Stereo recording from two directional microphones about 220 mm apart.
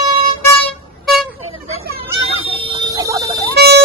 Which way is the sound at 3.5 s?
50° right (ahead or behind).